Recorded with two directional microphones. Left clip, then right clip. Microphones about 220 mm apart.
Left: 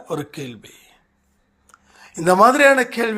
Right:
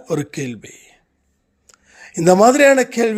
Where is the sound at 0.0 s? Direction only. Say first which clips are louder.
Right 5 dB; 50° right (ahead or behind).